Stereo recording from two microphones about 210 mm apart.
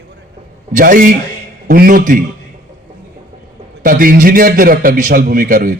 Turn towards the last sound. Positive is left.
turn(degrees=-40)  # may be behind; listen again after turning